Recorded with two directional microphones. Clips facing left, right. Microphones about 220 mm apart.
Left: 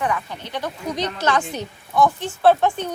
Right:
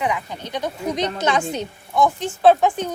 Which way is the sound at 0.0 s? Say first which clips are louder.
Even; 15° right (ahead or behind).